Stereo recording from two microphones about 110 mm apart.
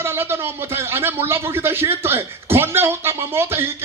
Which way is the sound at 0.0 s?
20° right (ahead or behind).